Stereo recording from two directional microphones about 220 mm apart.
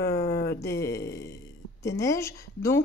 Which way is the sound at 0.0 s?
15° left (ahead or behind).